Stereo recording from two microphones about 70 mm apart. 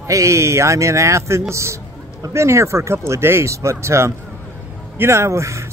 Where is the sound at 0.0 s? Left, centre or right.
Right.